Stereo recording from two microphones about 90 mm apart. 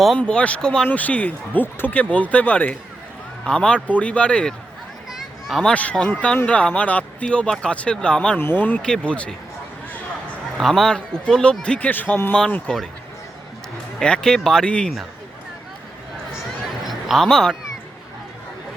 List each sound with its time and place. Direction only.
0.2 s speech: 10° left (ahead or behind)
5.5 s speech: centre (ahead or behind)
5.7 s speech: 15° left (ahead or behind)
8.4 s speech: 25° left (ahead or behind)
10.6 s speech: centre (ahead or behind)
14.0 s speech: 10° left (ahead or behind)
16.6 s honk: centre (ahead or behind)